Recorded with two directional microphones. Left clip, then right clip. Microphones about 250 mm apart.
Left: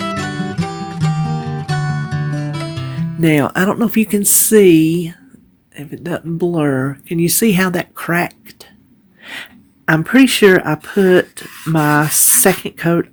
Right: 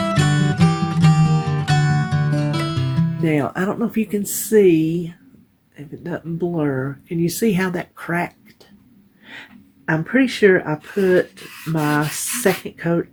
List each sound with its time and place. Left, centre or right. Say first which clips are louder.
0.0 s music: right 1 dB; centre
3.2 s speech: left 7 dB; left